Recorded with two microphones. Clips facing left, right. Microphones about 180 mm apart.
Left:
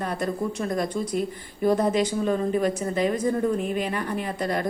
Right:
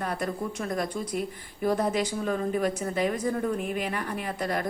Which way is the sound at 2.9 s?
5° right (ahead or behind).